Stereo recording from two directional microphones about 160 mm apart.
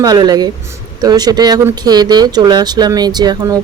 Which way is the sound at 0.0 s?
25° right (ahead or behind).